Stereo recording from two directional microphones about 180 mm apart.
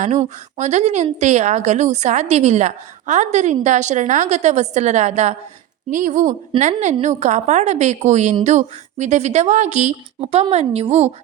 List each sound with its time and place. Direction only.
0.0 s a woman's voice: 40° right (ahead or behind)